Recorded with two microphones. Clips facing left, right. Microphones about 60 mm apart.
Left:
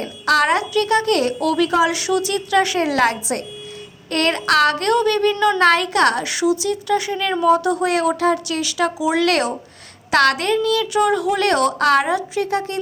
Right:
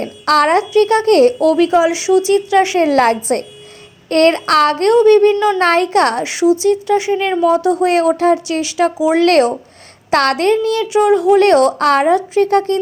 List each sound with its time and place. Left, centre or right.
0.0 s a sound: right
0.7 s speech: right
1.7 s a woman's voice: right
2.7 s a woman's voice: right
10.8 s speech: right